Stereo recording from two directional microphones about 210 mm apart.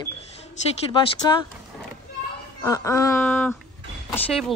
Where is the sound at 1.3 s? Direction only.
20° left (ahead or behind).